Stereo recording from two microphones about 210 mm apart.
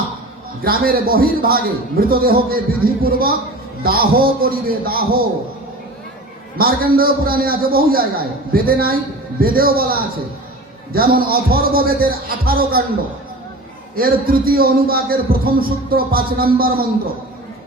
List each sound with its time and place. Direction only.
0.6 s a man's voice: 45° right (ahead or behind)
6.6 s a man's voice: 45° right (ahead or behind)
13.9 s a man's voice: 45° right (ahead or behind)